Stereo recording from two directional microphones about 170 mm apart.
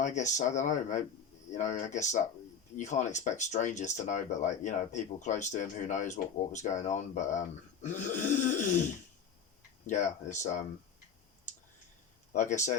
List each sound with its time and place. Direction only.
0.0 s speech: 45° left (ahead or behind)
9.8 s speech: 45° left (ahead or behind)
12.3 s speech: 45° left (ahead or behind)